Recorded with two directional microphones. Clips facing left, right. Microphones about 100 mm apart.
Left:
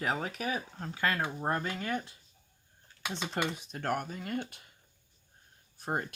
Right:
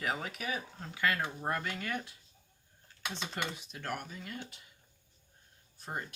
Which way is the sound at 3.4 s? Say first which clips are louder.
Left 5 dB; 40° left (ahead or behind).